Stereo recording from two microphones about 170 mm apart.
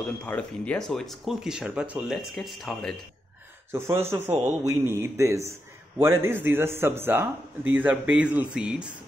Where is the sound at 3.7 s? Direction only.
15° right (ahead or behind).